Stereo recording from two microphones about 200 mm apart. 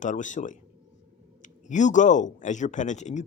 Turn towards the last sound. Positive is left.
turn(degrees=35)  # may be behind; listen again after turning